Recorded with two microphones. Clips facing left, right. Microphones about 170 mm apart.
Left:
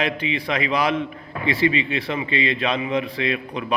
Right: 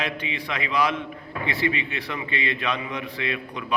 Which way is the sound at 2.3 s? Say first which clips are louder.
Left 5 dB; 90° left.